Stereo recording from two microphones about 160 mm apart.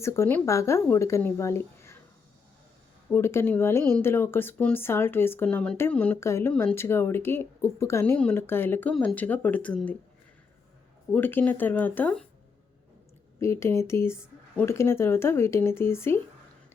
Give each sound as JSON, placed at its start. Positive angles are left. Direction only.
{"t": 0.0, "sound": "speech", "side_deg": 15}
{"t": 3.1, "sound": "speech", "side_deg": 15}
{"t": 11.1, "sound": "speech", "side_deg": 10}
{"t": 13.4, "sound": "speech", "side_deg": 15}